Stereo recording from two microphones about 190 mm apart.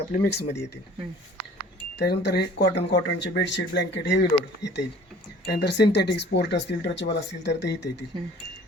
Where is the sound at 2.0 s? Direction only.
60° left (ahead or behind).